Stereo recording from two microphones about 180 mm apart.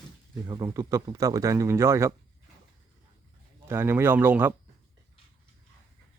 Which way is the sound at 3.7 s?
15° right (ahead or behind).